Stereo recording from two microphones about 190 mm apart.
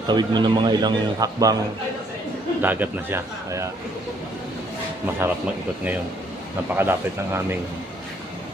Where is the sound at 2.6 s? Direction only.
10° right (ahead or behind).